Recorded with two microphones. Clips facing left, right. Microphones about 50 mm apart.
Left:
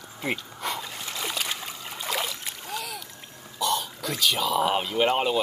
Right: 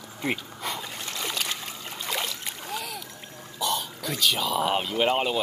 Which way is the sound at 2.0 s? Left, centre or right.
Centre.